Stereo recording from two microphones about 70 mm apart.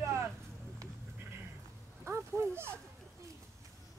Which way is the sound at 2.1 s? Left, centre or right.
Right.